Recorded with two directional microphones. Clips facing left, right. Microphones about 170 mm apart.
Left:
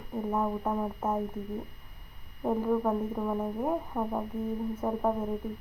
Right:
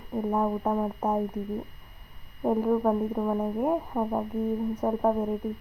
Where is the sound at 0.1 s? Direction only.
15° right (ahead or behind).